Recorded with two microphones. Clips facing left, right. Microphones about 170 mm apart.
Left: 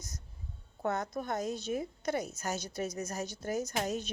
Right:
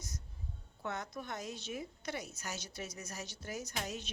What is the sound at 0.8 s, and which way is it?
A woman's voice, 45° left (ahead or behind).